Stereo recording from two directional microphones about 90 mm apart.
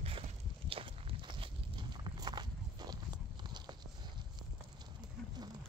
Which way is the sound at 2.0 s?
55° right (ahead or behind).